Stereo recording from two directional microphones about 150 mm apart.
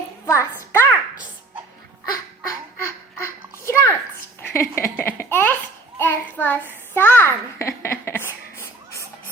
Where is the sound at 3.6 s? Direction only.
20° left (ahead or behind).